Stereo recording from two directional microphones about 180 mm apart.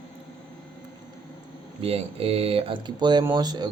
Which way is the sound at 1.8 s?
35° right (ahead or behind).